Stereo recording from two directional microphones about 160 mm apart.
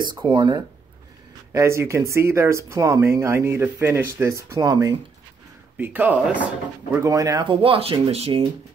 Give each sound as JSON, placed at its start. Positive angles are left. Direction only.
{"t": 0.1, "sound": "speech", "side_deg": -30}